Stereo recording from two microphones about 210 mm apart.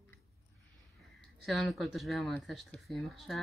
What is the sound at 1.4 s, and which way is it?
A woman's voice, centre (ahead or behind).